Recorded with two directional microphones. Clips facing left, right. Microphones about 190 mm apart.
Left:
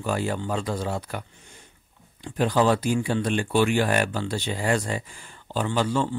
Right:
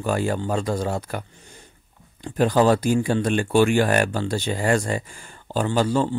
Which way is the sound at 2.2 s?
45° right (ahead or behind).